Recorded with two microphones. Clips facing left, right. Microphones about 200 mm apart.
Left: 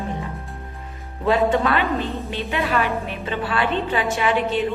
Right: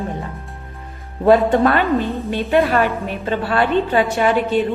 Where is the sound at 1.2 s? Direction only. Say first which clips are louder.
Right 6 dB; 45° right (ahead or behind).